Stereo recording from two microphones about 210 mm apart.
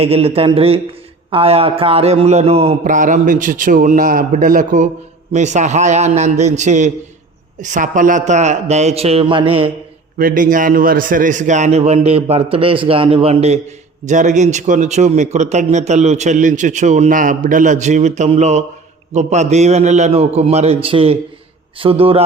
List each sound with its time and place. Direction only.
0.0 s a man's voice: 30° right (ahead or behind)
10.2 s a man's voice: 40° right (ahead or behind)